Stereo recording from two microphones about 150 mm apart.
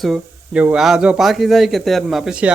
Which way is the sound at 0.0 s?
Centre (ahead or behind).